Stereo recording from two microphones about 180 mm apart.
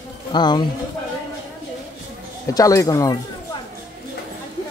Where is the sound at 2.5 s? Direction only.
20° left (ahead or behind).